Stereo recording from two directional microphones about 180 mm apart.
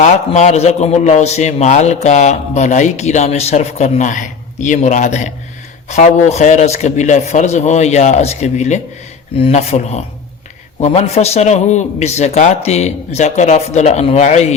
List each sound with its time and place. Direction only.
0.0 s a man's voice: 40° left (ahead or behind)